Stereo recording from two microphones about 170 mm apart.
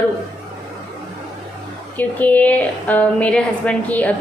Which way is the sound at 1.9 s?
10° left (ahead or behind).